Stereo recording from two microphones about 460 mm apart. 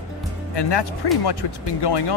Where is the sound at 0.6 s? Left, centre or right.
Left.